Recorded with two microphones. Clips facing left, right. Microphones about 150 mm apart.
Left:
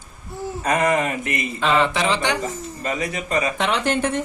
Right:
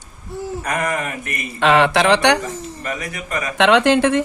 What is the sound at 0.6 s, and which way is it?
Speech, 25° left (ahead or behind).